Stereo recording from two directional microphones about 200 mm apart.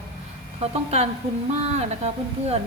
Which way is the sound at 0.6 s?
35° right (ahead or behind).